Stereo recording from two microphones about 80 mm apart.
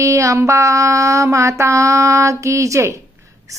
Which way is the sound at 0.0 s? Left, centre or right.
Right.